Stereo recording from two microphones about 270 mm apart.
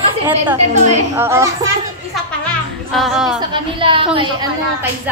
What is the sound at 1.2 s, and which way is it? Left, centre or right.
Speech, centre.